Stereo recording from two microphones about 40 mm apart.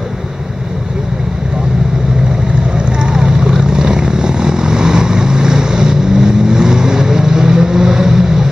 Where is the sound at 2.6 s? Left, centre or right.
Right.